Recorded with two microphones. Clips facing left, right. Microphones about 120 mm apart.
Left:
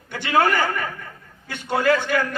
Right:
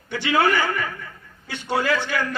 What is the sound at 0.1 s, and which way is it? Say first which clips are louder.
A man's voice: even; 50° left (ahead or behind).